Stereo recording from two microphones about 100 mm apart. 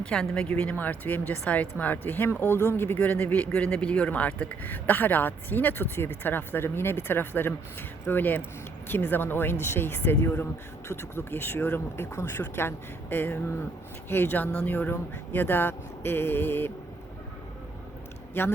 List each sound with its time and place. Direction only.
0.0 s speech: 5° left (ahead or behind)